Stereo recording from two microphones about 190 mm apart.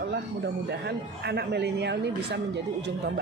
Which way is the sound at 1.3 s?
60° right (ahead or behind).